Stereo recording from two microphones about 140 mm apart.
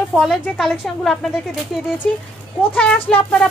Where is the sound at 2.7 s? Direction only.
5° left (ahead or behind).